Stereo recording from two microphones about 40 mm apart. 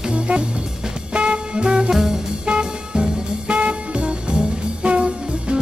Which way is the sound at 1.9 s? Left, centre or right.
Centre.